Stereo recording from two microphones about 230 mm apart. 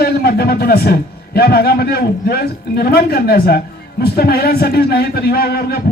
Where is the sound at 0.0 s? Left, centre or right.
Left.